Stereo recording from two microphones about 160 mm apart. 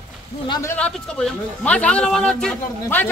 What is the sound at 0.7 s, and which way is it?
A man's voice, 5° left (ahead or behind).